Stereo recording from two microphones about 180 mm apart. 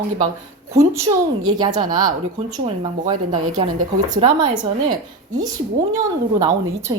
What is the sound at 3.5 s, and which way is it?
Speech, 20° right (ahead or behind).